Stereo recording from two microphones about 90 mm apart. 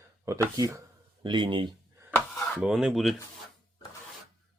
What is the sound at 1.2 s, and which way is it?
Speech, 60° right (ahead or behind).